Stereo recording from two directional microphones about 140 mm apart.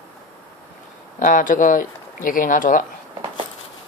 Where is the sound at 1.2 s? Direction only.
70° left (ahead or behind).